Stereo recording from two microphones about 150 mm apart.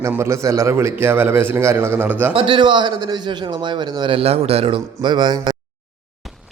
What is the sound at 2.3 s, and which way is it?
A man's voice, 35° right (ahead or behind).